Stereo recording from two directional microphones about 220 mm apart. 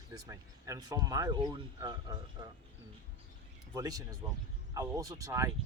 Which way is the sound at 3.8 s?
15° right (ahead or behind).